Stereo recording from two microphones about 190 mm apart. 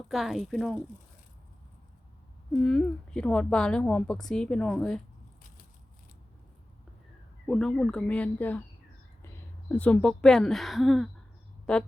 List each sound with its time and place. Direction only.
0.1 s a woman's voice: centre (ahead or behind)
2.5 s a woman's voice: 5° left (ahead or behind)
7.4 s a woman's voice: 5° left (ahead or behind)